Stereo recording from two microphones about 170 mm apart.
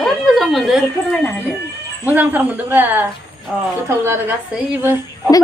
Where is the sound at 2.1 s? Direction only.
10° right (ahead or behind).